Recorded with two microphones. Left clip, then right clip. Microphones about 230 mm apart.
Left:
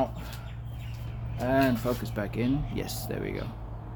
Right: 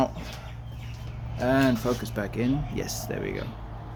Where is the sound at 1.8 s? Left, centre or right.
Centre.